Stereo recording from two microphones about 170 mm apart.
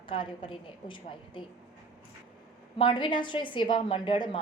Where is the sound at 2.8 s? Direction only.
30° left (ahead or behind).